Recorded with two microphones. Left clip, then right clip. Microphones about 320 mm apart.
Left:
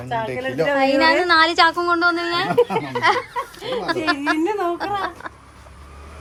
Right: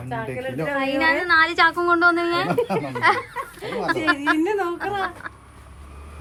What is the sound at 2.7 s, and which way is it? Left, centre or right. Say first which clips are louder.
Speech: left 3 dB; left.